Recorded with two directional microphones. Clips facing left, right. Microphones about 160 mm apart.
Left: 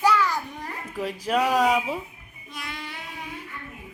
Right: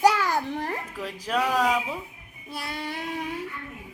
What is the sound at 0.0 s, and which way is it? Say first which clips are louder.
Babbling: right 1 dB; 45° right (ahead or behind).